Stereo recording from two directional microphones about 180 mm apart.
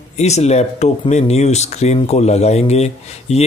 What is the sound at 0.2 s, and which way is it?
Speech, 40° left (ahead or behind).